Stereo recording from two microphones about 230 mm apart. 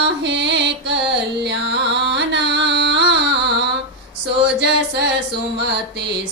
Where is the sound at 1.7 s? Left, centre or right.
Right.